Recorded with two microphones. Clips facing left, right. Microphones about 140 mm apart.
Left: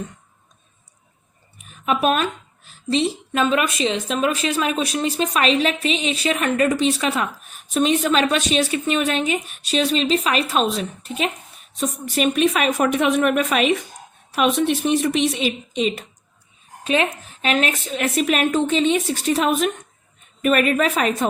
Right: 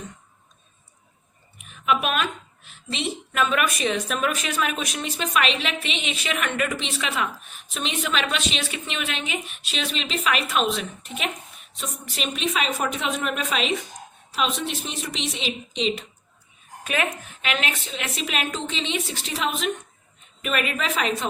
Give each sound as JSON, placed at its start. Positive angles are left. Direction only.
{"t": 1.6, "sound": "a woman's voice", "side_deg": 40}
{"t": 11.8, "sound": "a woman's voice", "side_deg": 45}
{"t": 16.8, "sound": "a woman's voice", "side_deg": 30}